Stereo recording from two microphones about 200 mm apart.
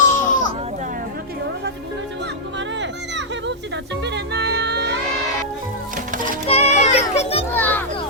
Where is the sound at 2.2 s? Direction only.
60° right (ahead or behind).